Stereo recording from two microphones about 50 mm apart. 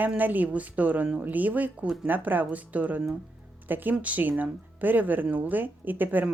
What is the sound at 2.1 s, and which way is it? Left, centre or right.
A woman's voice, right.